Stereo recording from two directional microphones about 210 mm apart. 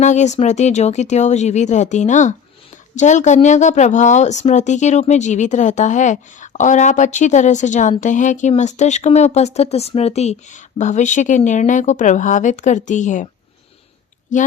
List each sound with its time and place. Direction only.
0.0 s speech: 35° left (ahead or behind)